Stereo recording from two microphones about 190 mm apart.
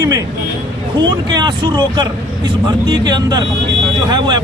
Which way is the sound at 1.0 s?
25° right (ahead or behind).